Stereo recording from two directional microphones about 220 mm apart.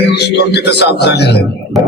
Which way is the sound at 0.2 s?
50° left (ahead or behind).